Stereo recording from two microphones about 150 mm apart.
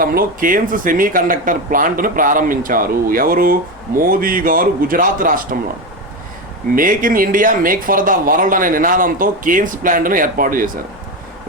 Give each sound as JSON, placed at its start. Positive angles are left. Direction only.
{"t": 0.0, "sound": "speech", "side_deg": -75}
{"t": 6.7, "sound": "speech", "side_deg": -65}